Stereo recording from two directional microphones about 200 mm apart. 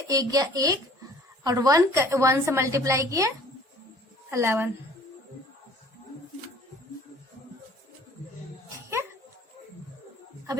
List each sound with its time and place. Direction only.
0.1 s a woman's voice: 20° right (ahead or behind)